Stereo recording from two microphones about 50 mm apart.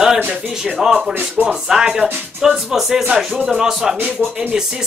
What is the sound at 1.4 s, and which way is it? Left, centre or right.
Speech, centre.